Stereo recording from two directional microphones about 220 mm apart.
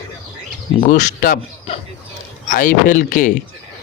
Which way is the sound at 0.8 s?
35° left (ahead or behind).